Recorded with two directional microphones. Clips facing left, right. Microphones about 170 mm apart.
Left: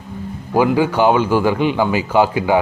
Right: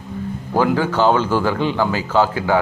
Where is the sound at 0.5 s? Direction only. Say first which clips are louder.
Left 3 dB; 15° left (ahead or behind).